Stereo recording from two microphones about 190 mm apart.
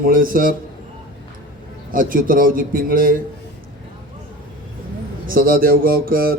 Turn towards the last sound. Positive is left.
turn(degrees=-50)  # may be behind; listen again after turning